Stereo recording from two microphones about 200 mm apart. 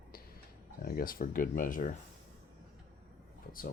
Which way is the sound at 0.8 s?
45° left (ahead or behind).